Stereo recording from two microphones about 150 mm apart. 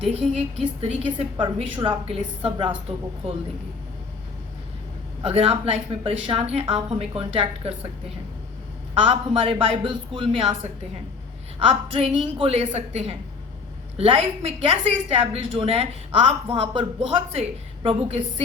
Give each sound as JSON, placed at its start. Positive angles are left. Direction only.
{"t": 0.0, "sound": "a woman's voice", "side_deg": -45}
{"t": 5.2, "sound": "a woman's voice", "side_deg": -40}
{"t": 9.0, "sound": "a woman's voice", "side_deg": -35}
{"t": 11.7, "sound": "a woman's voice", "side_deg": -40}